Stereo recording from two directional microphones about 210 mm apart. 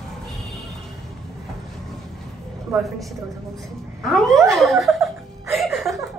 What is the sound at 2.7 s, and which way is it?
Speech, centre (ahead or behind).